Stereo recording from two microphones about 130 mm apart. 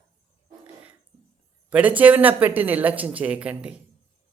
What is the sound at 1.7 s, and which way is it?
Speech, 10° right (ahead or behind).